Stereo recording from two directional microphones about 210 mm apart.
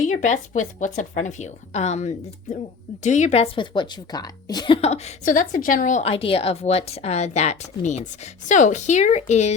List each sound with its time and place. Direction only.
0.0 s a woman's voice: 35° left (ahead or behind)